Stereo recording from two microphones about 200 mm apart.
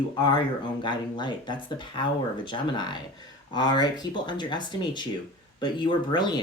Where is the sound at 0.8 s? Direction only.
25° left (ahead or behind).